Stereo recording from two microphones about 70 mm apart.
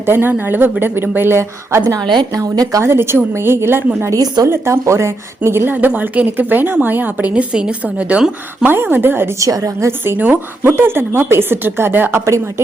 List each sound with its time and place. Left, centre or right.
0.0 s speech: right
2.0 s a woman's voice: right
2.3 s speech: right
2.8 s a woman's voice: right; by 8.2 s centre
8.6 s speech: right
9.4 s a woman's voice: right
10.0 s a woman's voice: right
10.8 s speech: right